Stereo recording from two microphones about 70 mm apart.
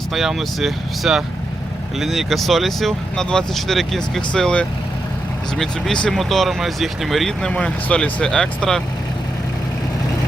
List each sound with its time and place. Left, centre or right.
0.1 s speech: centre
7.4 s speech: centre